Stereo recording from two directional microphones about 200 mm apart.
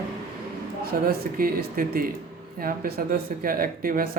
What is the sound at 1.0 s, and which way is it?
Speech, 50° right (ahead or behind).